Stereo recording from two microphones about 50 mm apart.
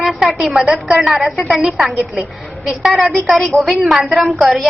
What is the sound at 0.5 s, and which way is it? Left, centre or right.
Speech, centre.